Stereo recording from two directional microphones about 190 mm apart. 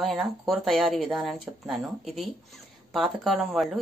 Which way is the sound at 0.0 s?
Centre (ahead or behind).